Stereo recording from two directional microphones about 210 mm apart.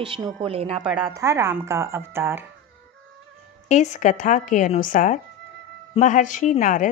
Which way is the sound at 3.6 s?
35° left (ahead or behind).